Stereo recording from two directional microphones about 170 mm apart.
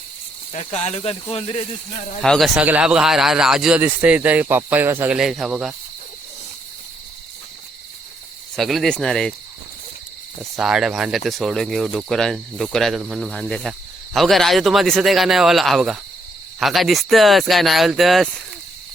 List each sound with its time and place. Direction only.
0.5 s speech: 40° left (ahead or behind)
2.2 s speech: 5° left (ahead or behind)
2.6 s speech: 10° right (ahead or behind)
8.5 s speech: centre (ahead or behind)
10.4 s speech: 5° right (ahead or behind)